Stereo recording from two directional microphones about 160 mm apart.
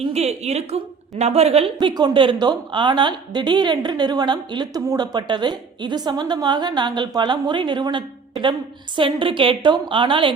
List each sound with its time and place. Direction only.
0.1 s a woman's voice: 40° right (ahead or behind)